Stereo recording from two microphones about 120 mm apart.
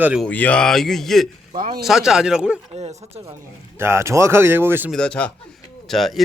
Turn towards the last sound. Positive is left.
turn(degrees=0)  # may be behind; listen again after turning